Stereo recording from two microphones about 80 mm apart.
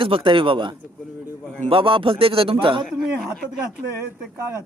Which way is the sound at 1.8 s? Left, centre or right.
Right.